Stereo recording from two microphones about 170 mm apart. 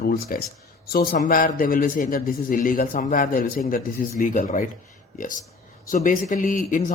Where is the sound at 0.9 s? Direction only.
50° left (ahead or behind).